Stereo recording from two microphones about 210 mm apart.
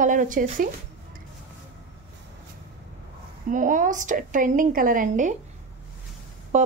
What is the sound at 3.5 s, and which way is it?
Speech, 40° right (ahead or behind).